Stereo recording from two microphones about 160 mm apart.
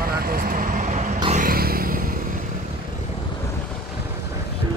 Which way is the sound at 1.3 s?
60° right (ahead or behind).